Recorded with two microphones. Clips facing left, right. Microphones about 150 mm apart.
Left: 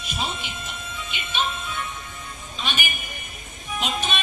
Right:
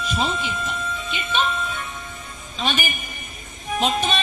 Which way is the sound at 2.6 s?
40° right (ahead or behind).